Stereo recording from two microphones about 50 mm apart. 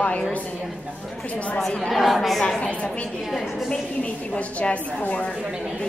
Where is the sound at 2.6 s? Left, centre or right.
Left.